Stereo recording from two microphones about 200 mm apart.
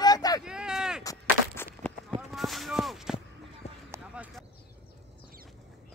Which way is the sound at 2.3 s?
Centre (ahead or behind).